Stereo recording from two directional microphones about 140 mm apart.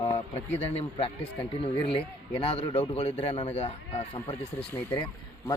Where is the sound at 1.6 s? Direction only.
40° left (ahead or behind).